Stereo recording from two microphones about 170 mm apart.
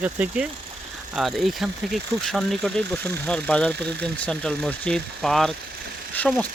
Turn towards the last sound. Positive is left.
turn(degrees=10)  # may be behind; listen again after turning